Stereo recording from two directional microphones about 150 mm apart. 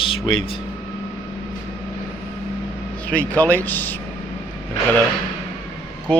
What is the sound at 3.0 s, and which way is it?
Speech, 10° left (ahead or behind).